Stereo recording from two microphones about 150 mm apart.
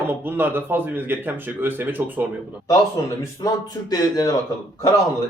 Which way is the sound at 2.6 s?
20° left (ahead or behind).